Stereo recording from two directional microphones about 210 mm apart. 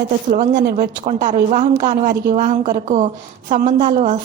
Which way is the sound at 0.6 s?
45° right (ahead or behind).